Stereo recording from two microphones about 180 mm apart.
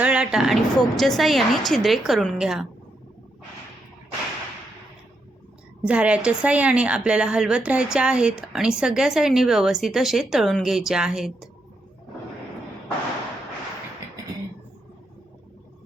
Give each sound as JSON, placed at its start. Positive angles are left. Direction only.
{"t": 0.0, "sound": "a woman's voice", "side_deg": -5}
{"t": 5.8, "sound": "a woman's voice", "side_deg": -5}